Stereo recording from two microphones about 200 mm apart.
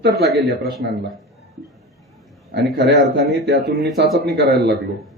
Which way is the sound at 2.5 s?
60° right (ahead or behind).